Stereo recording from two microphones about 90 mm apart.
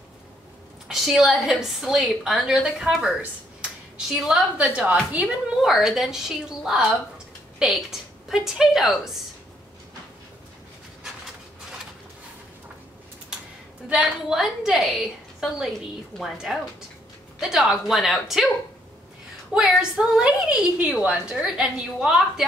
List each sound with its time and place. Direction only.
0.8 s a woman's voice: 5° right (ahead or behind)
5.5 s a woman's voice: 5° right (ahead or behind)
13.8 s a woman's voice: 10° right (ahead or behind)
17.4 s a woman's voice: 5° right (ahead or behind)
19.5 s a woman's voice: 5° right (ahead or behind)